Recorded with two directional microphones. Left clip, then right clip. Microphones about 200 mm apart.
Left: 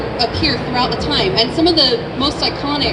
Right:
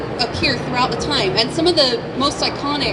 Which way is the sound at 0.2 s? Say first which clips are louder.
Left 2 dB; 35° right (ahead or behind).